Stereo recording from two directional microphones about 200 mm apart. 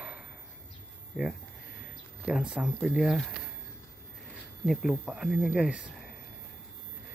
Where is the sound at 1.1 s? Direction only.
Centre (ahead or behind).